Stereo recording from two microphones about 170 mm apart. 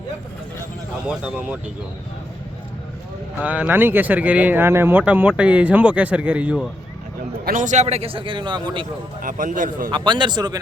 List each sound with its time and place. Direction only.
1.0 s speech: 5° right (ahead or behind)
3.4 s speech: 10° right (ahead or behind)
7.4 s a man's voice: 50° right (ahead or behind); by 8.9 s 25° right (ahead or behind)
9.2 s a man's voice: 50° right (ahead or behind)
9.9 s speech: 25° right (ahead or behind)